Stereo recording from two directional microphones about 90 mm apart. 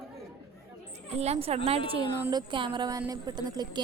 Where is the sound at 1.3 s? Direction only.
90° right.